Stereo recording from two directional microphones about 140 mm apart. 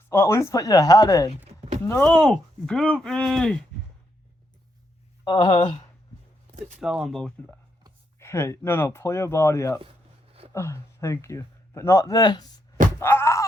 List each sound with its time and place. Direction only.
0.1 s speech: 20° left (ahead or behind)
1.5 s a sound: 50° right (ahead or behind)
1.9 s speech: 10° left (ahead or behind)
5.2 s speech: 30° left (ahead or behind)
6.7 s speech: 5° right (ahead or behind)
8.2 s a man's voice: 20° left (ahead or behind)
13.0 s a sound: 20° left (ahead or behind)